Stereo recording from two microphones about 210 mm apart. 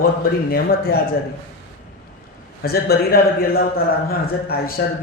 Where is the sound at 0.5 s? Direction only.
45° left (ahead or behind).